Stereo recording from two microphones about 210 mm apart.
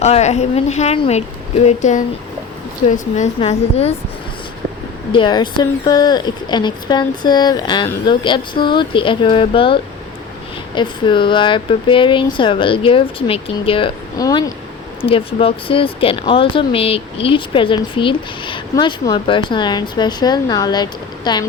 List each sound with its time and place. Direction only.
0.0 s a woman's voice: 30° left (ahead or behind)
5.1 s speech: 20° left (ahead or behind)